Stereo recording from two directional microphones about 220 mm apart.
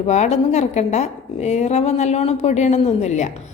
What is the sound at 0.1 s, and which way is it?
A woman's voice, 30° left (ahead or behind).